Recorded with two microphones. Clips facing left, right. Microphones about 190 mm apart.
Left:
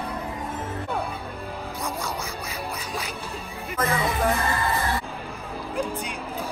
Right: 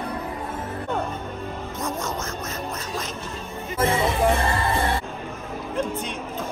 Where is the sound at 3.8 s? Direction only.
25° right (ahead or behind).